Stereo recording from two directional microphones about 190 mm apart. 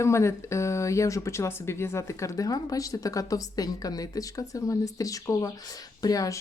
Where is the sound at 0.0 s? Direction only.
15° left (ahead or behind).